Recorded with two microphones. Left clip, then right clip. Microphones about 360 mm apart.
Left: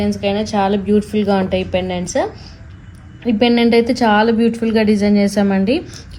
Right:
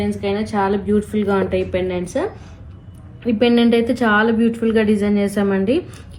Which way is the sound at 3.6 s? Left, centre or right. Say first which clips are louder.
Left 3 dB; left.